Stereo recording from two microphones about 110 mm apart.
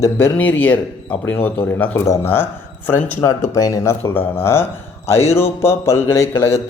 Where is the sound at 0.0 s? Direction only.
15° left (ahead or behind).